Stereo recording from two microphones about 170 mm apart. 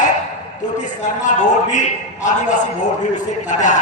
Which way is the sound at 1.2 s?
45° left (ahead or behind).